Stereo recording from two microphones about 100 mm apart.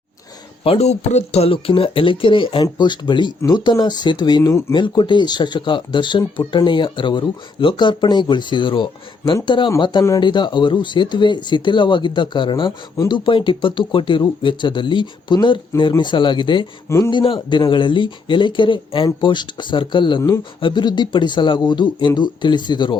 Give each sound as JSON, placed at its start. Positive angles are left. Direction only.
{"t": 0.6, "sound": "speech", "side_deg": 80}